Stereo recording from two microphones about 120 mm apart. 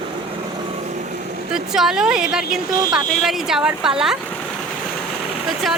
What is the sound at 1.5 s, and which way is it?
A woman's voice, 5° right (ahead or behind).